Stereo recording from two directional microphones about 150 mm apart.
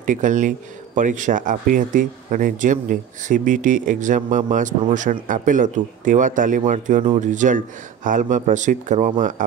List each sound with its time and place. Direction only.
0.0 s speech: 60° right (ahead or behind)